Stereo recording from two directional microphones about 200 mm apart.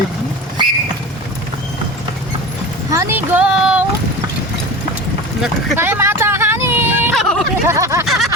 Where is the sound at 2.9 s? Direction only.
15° right (ahead or behind).